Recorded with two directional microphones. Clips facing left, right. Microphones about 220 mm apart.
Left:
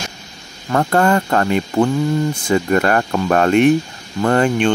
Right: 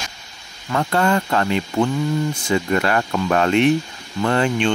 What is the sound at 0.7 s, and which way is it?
Speech, 50° left (ahead or behind).